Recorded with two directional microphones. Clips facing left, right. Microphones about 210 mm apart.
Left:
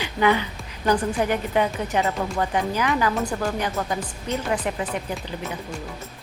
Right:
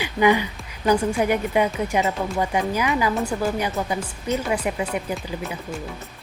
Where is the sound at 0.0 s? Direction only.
10° right (ahead or behind).